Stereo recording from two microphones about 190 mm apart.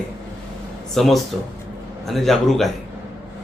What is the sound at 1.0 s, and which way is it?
A man's voice, centre (ahead or behind).